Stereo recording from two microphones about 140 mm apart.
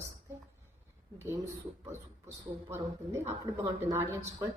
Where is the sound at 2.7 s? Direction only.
20° right (ahead or behind).